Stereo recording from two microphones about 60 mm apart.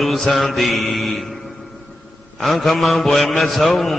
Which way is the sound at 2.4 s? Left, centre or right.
Centre.